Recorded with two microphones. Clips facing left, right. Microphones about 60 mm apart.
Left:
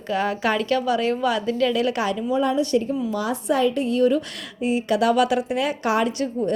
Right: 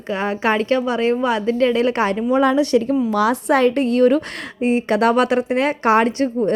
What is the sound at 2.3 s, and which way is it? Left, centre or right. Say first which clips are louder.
Speech: right 5 dB; right.